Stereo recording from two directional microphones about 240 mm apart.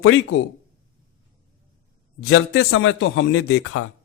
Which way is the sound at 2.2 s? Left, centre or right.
Left.